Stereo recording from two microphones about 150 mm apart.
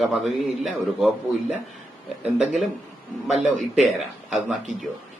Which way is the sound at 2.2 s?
Centre (ahead or behind).